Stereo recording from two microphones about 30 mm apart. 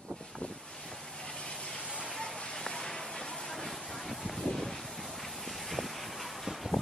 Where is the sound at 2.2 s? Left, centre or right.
Centre.